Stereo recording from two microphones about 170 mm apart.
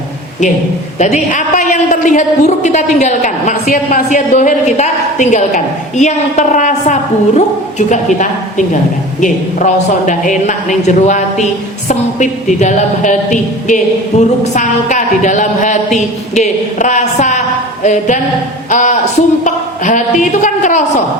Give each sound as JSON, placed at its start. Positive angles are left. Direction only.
{"t": 0.9, "sound": "a man's voice", "side_deg": 45}